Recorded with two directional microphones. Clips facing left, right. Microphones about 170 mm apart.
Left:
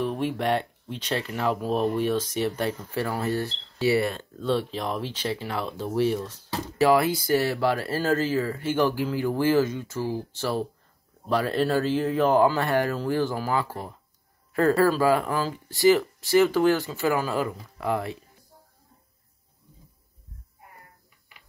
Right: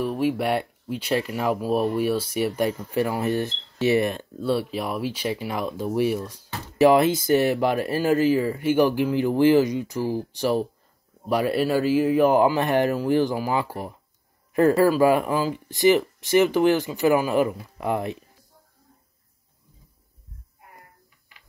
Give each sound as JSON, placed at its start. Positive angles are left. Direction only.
{"t": 0.0, "sound": "speech", "side_deg": -5}